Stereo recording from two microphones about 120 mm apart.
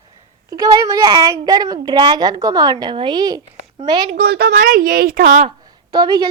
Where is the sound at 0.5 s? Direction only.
30° right (ahead or behind).